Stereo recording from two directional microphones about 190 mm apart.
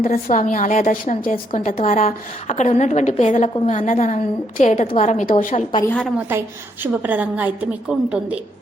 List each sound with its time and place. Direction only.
0.0 s a woman's voice: 45° left (ahead or behind)
5.9 s a woman's voice: 5° left (ahead or behind)
6.1 s a woman's voice: 10° right (ahead or behind)